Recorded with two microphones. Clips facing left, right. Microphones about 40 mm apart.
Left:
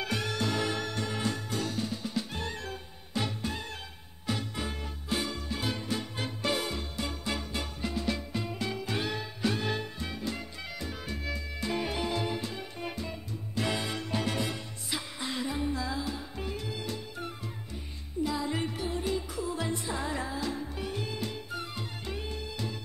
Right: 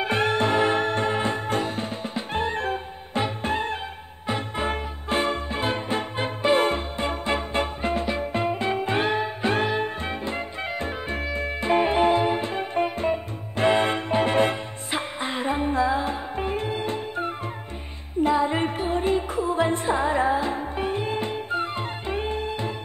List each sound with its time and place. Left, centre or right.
0.0 s music: right